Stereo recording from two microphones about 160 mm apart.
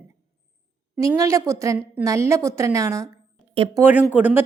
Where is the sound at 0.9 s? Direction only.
20° right (ahead or behind).